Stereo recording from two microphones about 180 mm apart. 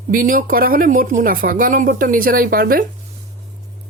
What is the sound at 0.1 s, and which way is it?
Speech, 50° right (ahead or behind).